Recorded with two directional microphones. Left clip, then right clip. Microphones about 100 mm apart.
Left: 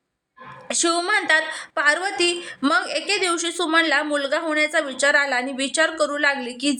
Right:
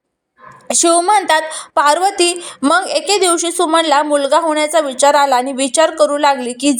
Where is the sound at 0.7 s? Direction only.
35° right (ahead or behind).